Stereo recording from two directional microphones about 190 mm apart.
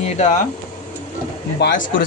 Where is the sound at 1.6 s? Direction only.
45° left (ahead or behind).